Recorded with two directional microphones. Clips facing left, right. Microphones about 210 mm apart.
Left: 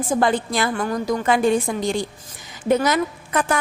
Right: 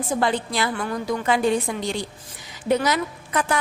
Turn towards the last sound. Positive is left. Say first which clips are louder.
# left 2 dB
turn(degrees=50)  # may be behind; listen again after turning